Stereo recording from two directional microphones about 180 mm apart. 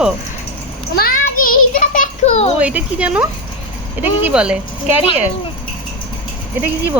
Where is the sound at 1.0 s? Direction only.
50° left (ahead or behind).